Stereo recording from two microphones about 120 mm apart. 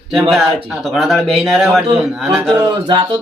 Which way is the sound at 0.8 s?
Centre (ahead or behind).